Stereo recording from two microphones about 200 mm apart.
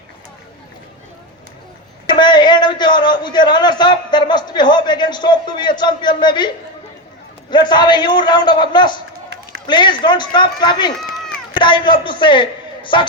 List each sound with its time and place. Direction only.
2.1 s a man's voice: 20° left (ahead or behind)
7.5 s a man's voice: 20° left (ahead or behind)